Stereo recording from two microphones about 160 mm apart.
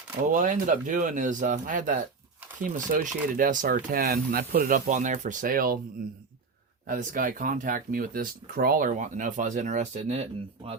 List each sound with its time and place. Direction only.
0.3 s speech: 55° right (ahead or behind)
6.8 s speech: 55° right (ahead or behind)